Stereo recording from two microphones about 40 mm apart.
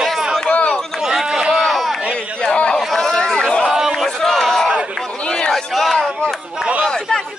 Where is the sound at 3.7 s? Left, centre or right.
Centre.